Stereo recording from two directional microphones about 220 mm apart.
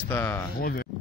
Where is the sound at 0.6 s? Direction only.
40° left (ahead or behind).